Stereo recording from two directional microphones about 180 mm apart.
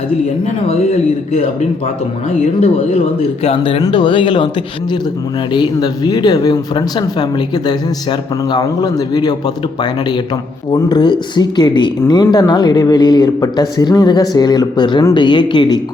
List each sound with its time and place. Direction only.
2.6 s speech: 35° left (ahead or behind)
5.5 s speech: 25° left (ahead or behind)
10.7 s speech: 25° left (ahead or behind)